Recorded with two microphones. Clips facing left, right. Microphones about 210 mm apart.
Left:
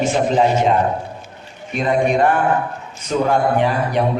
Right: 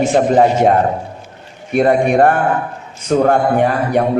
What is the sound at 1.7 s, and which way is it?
A man's voice, 60° right (ahead or behind).